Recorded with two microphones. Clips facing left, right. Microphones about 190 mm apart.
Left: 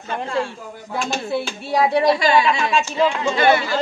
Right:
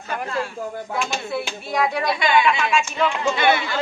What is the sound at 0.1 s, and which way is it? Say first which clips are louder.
Speech: left 3 dB; 25° left (ahead or behind).